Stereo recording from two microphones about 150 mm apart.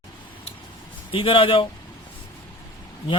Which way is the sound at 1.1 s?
35° left (ahead or behind).